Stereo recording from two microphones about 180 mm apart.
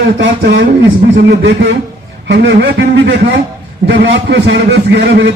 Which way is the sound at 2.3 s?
70° right (ahead or behind).